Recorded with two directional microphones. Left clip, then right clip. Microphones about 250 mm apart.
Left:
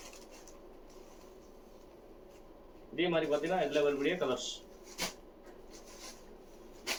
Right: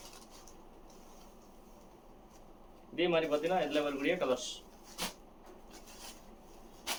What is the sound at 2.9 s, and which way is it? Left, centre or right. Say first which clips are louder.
Speech: right 1 dB; right.